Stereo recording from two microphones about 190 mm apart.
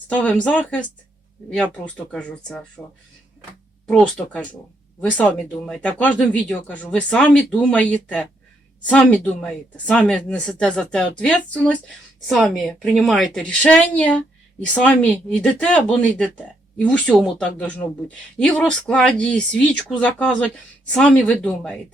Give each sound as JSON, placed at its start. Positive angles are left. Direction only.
{"t": 0.1, "sound": "a woman's voice", "side_deg": 5}
{"t": 3.8, "sound": "a woman's voice", "side_deg": 5}